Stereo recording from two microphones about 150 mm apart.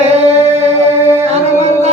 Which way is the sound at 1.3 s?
45° right (ahead or behind).